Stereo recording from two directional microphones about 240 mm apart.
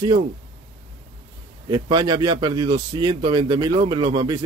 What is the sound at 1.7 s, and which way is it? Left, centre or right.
Speech, centre.